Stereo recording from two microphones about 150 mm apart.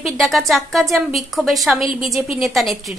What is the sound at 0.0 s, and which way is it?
A woman's voice, centre (ahead or behind).